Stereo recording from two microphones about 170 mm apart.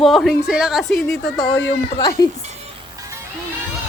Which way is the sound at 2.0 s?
20° left (ahead or behind).